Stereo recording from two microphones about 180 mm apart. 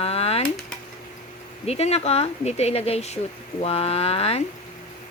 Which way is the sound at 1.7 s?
35° left (ahead or behind).